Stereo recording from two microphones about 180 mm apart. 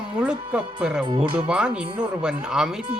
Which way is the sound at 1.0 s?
25° right (ahead or behind).